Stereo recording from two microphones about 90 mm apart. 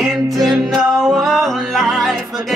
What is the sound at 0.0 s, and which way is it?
Music, centre (ahead or behind).